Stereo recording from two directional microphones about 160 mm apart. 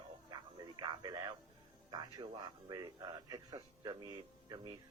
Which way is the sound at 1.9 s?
25° right (ahead or behind).